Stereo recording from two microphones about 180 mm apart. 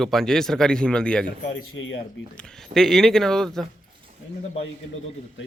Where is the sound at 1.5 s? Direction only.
90° left.